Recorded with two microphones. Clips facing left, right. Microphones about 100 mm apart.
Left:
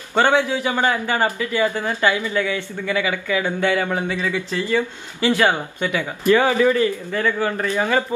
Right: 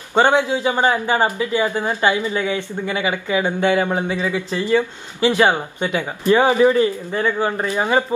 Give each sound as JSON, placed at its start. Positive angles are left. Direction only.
{"t": 0.1, "sound": "a man's voice", "side_deg": -20}